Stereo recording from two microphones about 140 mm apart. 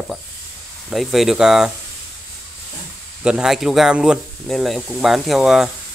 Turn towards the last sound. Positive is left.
turn(degrees=-5)  # may be behind; listen again after turning